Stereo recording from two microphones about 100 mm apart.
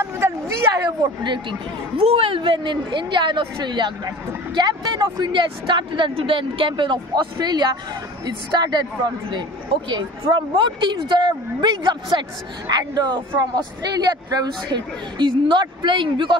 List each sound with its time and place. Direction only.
0.0 s a sound: 25° right (ahead or behind)
0.8 s speech: 50° right (ahead or behind)
2.0 s speech: 70° right (ahead or behind); by 8.8 s 45° right (ahead or behind)
9.8 s speech: 50° right (ahead or behind)